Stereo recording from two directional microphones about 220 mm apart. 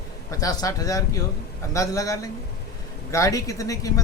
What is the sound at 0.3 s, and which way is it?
Speech, 15° left (ahead or behind).